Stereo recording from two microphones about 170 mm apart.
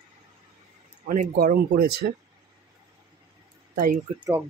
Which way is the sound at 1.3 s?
60° right (ahead or behind).